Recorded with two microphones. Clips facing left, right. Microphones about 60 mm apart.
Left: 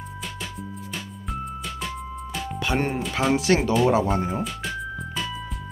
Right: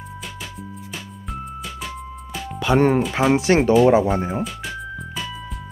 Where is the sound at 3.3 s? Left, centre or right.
Right.